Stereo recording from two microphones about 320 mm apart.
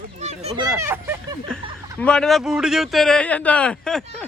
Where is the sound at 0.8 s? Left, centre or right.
Centre.